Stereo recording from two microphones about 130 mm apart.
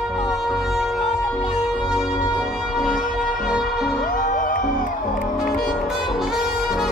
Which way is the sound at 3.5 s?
5° right (ahead or behind).